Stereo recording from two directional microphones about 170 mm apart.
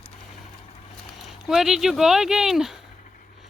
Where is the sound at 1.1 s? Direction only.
Centre (ahead or behind).